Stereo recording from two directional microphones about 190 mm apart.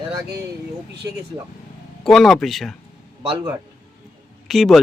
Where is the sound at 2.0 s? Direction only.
Centre (ahead or behind).